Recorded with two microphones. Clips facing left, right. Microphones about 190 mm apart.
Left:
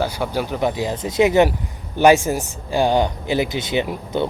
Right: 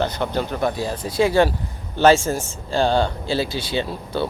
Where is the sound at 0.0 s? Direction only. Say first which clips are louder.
Even; 10° left (ahead or behind).